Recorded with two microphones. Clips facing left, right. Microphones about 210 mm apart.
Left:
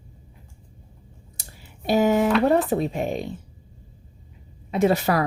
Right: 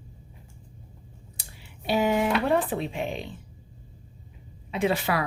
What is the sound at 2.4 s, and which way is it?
Speech, 40° left (ahead or behind).